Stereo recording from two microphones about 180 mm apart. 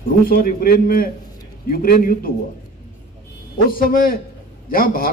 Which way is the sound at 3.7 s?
50° left (ahead or behind).